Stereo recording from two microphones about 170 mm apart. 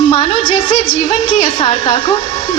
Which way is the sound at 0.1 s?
30° left (ahead or behind).